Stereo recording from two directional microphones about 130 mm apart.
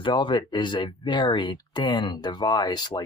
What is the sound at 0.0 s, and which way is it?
Speech, 35° left (ahead or behind).